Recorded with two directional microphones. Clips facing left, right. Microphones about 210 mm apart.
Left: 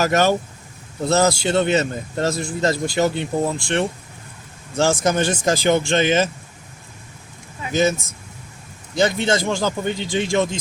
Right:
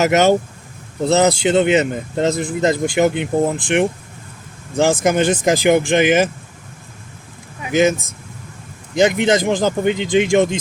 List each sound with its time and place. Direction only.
0.0 s speech: 20° right (ahead or behind)
5.0 s speech: 15° right (ahead or behind)
7.6 s speech: 15° right (ahead or behind)
9.0 s speech: 15° right (ahead or behind)